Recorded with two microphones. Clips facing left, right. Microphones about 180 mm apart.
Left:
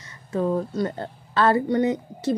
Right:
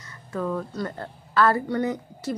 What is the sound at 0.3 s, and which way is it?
A woman's voice, 30° left (ahead or behind).